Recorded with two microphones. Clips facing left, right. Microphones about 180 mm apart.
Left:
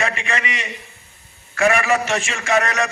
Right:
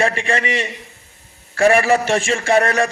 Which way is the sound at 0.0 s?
35° right (ahead or behind).